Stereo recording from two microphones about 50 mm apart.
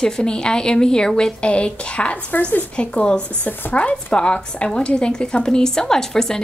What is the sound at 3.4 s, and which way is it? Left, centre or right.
Speech, left.